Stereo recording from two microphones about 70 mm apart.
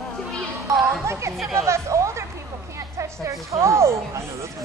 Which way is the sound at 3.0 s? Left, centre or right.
Right.